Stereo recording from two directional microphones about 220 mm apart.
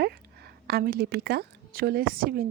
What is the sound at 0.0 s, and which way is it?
A woman's voice, 45° right (ahead or behind).